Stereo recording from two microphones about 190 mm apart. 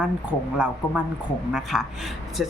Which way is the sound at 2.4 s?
Centre (ahead or behind).